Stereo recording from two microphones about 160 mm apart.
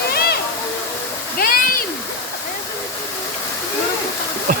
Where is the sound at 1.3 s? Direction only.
65° left (ahead or behind).